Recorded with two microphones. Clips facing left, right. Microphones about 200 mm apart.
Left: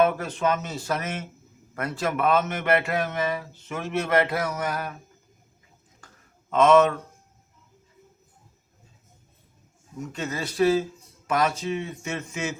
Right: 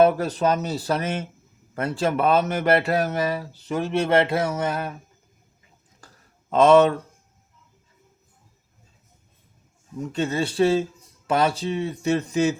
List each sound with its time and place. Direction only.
0.0 s speech: 35° right (ahead or behind)
6.0 s a sound: 35° right (ahead or behind)
6.5 s speech: 35° right (ahead or behind)
10.0 s speech: 30° right (ahead or behind)